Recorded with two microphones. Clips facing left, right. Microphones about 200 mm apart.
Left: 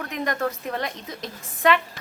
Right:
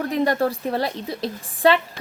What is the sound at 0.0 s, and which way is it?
A woman's voice, 35° right (ahead or behind).